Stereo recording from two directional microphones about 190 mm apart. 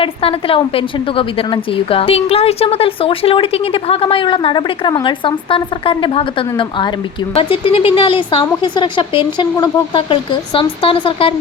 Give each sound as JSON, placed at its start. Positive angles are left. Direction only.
{"t": 0.0, "sound": "a woman's voice", "side_deg": 30}